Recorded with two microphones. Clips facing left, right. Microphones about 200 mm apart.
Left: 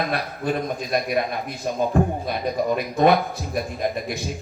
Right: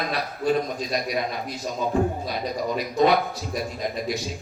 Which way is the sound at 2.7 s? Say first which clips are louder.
Left 1 dB; 55° left (ahead or behind).